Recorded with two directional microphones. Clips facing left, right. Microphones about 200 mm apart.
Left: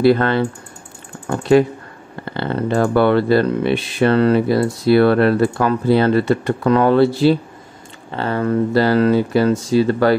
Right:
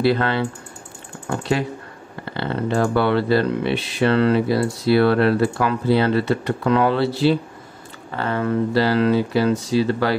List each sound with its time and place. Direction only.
0.0 s speech: 50° left (ahead or behind)
2.3 s speech: 50° left (ahead or behind)
8.1 s speech: 35° left (ahead or behind); by 10.1 s 50° left (ahead or behind)